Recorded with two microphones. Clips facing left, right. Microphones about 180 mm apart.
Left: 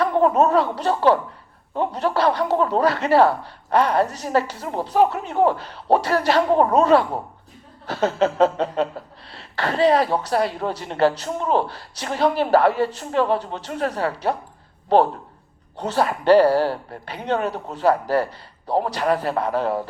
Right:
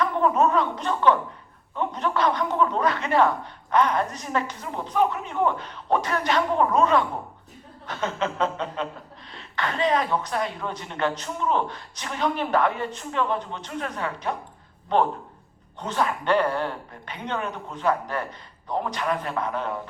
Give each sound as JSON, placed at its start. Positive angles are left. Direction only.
{"t": 0.0, "sound": "speech", "side_deg": 35}
{"t": 15.7, "sound": "speech", "side_deg": 35}